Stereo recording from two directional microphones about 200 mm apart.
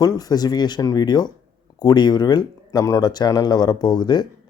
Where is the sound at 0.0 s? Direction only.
20° left (ahead or behind).